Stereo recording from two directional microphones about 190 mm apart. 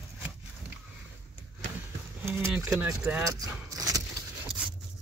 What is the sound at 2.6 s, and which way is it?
Speech, 15° right (ahead or behind).